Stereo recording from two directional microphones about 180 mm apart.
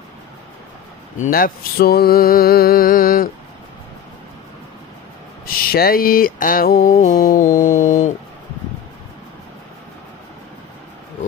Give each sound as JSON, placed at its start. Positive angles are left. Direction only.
{"t": 1.1, "sound": "mantra", "side_deg": 50}
{"t": 5.7, "sound": "a sound", "side_deg": 55}
{"t": 7.0, "sound": "mantra", "side_deg": 45}